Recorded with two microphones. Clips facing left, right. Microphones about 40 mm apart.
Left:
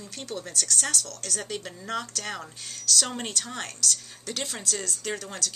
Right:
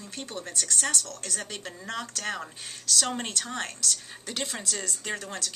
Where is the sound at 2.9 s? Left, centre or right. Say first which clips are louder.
Right 1 dB; centre.